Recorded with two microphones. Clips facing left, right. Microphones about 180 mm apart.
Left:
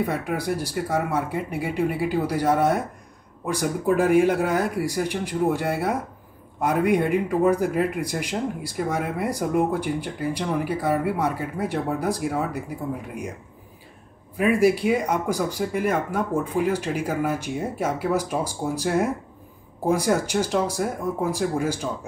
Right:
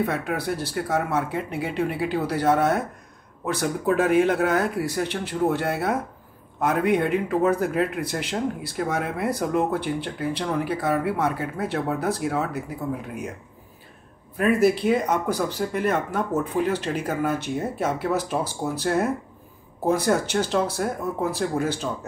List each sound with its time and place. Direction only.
0.0 s speech: 10° left (ahead or behind)
14.3 s speech: 10° left (ahead or behind)